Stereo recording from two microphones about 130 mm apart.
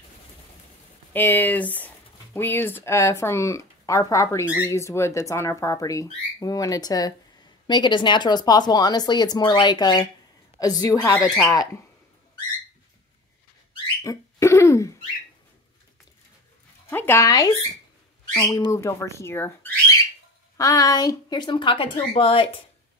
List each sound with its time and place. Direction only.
1.1 s speech: 15° left (ahead or behind)
14.0 s a sound: 20° left (ahead or behind)
16.9 s speech: 20° left (ahead or behind); by 18.7 s 35° left (ahead or behind)
18.7 s speech: 25° left (ahead or behind); by 22.5 s 45° left (ahead or behind)